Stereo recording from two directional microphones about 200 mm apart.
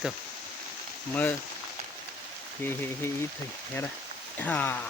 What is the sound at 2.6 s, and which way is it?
Speech, 10° left (ahead or behind).